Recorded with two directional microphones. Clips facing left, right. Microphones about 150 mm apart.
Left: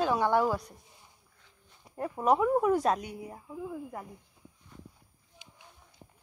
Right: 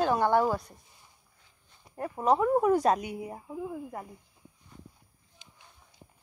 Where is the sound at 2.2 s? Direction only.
Centre (ahead or behind); by 3.8 s 20° right (ahead or behind).